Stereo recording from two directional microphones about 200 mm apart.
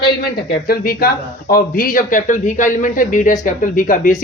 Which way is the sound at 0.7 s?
50° left (ahead or behind).